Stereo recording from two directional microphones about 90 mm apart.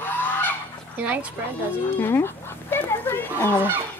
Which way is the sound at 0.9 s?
20° right (ahead or behind).